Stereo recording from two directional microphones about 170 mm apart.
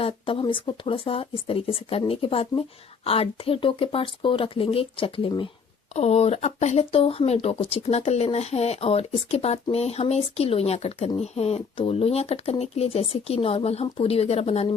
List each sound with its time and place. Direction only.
0.0 s speech: 30° left (ahead or behind)